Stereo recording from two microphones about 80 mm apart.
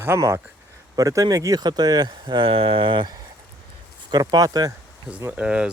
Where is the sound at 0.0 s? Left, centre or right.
Right.